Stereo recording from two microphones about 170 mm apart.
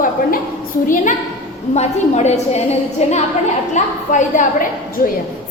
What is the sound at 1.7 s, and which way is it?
A woman's voice, 40° left (ahead or behind).